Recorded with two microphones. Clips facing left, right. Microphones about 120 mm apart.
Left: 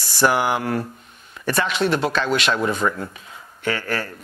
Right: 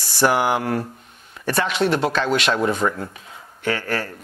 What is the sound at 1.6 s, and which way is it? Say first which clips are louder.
Speech: right 2 dB; 55° right (ahead or behind).